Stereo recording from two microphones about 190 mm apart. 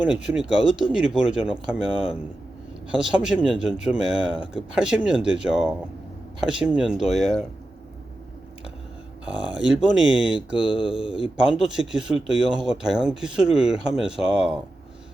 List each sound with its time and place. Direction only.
0.0 s speech: 5° right (ahead or behind)
3.0 s speech: 5° right (ahead or behind)
9.2 s speech: 5° right (ahead or behind)
10.6 s mantra: 25° left (ahead or behind)
11.3 s speech: 5° right (ahead or behind)